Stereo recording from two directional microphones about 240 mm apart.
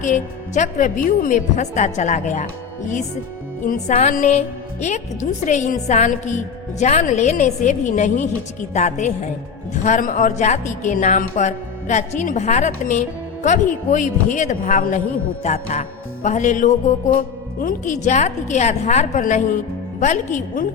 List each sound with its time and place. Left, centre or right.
0.0 s a woman's voice: left
3.6 s a woman's voice: left
6.7 s music: left
9.8 s a woman's voice: left
15.4 s music: left
20.0 s a woman's voice: left